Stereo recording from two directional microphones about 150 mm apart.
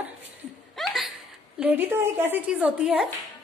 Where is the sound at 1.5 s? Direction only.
10° right (ahead or behind).